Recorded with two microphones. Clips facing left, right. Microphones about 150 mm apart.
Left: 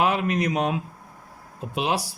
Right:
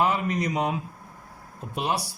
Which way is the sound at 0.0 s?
75° left (ahead or behind).